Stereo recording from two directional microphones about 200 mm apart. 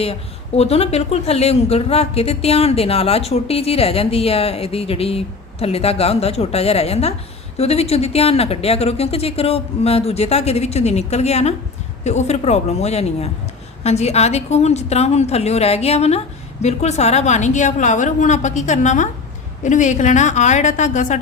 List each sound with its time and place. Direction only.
0.0 s speech: 30° left (ahead or behind)